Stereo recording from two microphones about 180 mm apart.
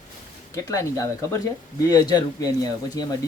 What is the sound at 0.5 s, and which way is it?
Speech, 15° left (ahead or behind).